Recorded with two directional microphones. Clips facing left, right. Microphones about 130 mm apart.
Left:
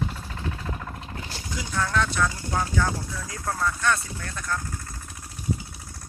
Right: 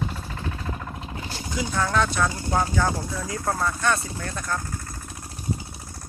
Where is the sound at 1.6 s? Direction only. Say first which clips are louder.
Right 3 dB; 20° right (ahead or behind).